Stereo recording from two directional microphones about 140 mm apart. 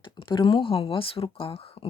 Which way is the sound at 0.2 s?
35° left (ahead or behind).